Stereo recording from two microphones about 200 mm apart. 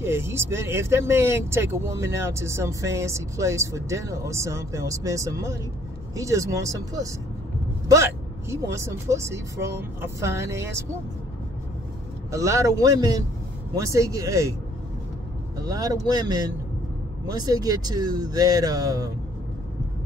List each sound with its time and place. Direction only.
0.0 s speech: 10° right (ahead or behind)
12.3 s speech: 15° right (ahead or behind)
15.5 s speech: 20° right (ahead or behind)